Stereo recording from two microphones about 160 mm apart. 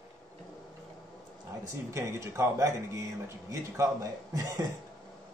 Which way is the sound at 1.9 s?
20° right (ahead or behind).